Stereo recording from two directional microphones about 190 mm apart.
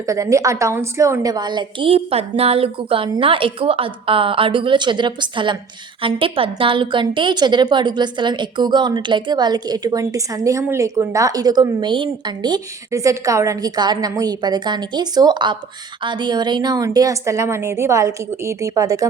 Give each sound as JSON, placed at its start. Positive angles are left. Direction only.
{"t": 0.0, "sound": "a woman's voice", "side_deg": -15}